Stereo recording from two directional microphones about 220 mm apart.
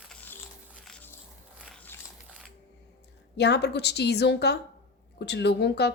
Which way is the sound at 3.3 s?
50° left (ahead or behind).